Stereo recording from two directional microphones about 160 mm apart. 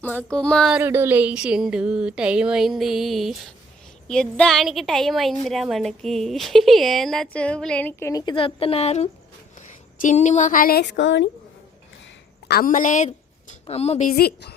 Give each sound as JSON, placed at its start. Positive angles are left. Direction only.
{"t": 0.0, "sound": "speech", "side_deg": 10}
{"t": 0.8, "sound": "a woman's voice", "side_deg": -15}
{"t": 12.5, "sound": "a woman's voice", "side_deg": 65}
{"t": 13.1, "sound": "a sound", "side_deg": 40}
{"t": 14.1, "sound": "a woman's voice", "side_deg": 85}